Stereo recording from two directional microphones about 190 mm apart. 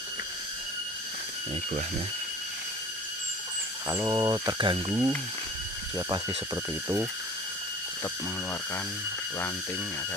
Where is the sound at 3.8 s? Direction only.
15° right (ahead or behind).